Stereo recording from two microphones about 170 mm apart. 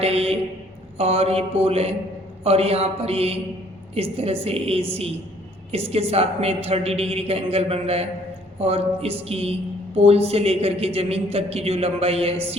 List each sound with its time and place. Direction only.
0.0 s a sound: 35° right (ahead or behind)
0.9 s speech: 35° right (ahead or behind)
5.9 s speech: 35° right (ahead or behind)